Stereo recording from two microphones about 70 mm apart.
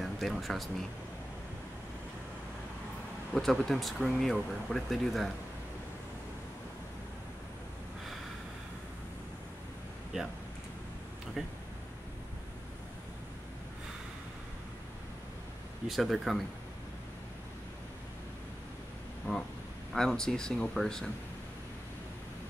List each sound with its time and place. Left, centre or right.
0.0 s a sound: centre
3.3 s speech: centre
10.1 s speech: centre
11.4 s speech: centre
15.9 s speech: centre
19.2 s a sound: left
20.2 s speech: centre
20.7 s speech: centre